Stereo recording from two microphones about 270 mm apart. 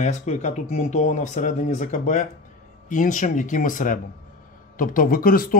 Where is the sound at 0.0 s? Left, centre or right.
Left.